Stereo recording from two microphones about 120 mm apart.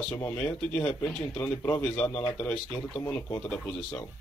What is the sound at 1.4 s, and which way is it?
Speech, 20° left (ahead or behind).